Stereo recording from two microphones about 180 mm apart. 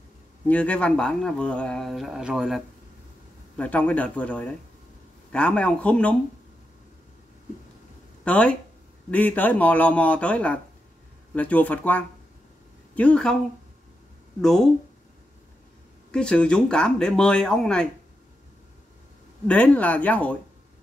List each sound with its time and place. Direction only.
0.5 s speech: 5° left (ahead or behind)
3.5 s speech: 10° left (ahead or behind)
8.2 s speech: 5° left (ahead or behind)
14.4 s speech: centre (ahead or behind)
16.1 s speech: 5° left (ahead or behind)
19.4 s speech: 5° left (ahead or behind)